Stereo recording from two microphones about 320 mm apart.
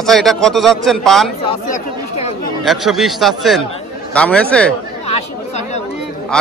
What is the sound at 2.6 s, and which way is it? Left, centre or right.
A man's voice, centre.